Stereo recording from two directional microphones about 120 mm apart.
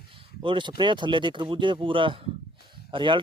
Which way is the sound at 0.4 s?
40° right (ahead or behind).